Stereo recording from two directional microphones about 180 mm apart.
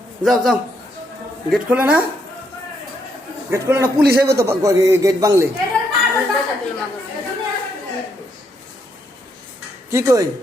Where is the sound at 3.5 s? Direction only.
15° right (ahead or behind).